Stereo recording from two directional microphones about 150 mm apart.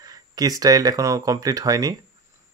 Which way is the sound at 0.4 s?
25° right (ahead or behind).